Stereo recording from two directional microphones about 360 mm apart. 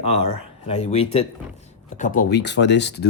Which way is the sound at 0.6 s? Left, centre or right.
Centre.